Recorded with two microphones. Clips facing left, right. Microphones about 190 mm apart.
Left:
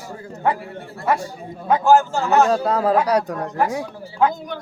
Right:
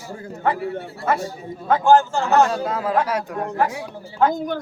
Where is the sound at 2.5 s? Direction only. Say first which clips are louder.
Left 4 dB; 40° left (ahead or behind).